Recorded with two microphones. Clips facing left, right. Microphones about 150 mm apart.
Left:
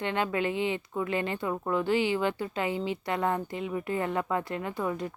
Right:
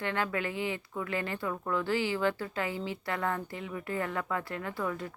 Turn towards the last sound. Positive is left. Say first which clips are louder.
# left 3 dB
turn(degrees=20)  # may be behind; listen again after turning